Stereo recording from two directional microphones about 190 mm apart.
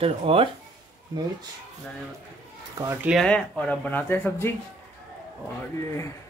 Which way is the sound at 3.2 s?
5° left (ahead or behind).